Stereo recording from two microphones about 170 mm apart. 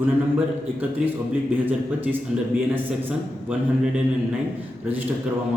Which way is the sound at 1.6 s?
10° right (ahead or behind).